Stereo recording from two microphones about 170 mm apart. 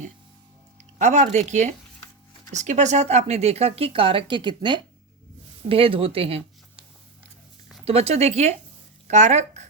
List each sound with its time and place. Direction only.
0.9 s speech: 45° right (ahead or behind)
7.9 s speech: 35° right (ahead or behind)